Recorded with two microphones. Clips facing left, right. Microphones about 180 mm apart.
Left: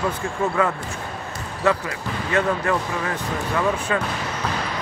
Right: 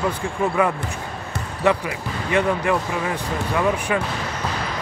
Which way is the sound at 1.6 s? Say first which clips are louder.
Right 1 dB; 15° right (ahead or behind).